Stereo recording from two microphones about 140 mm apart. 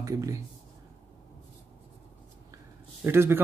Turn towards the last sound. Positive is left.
turn(degrees=-15)  # may be behind; listen again after turning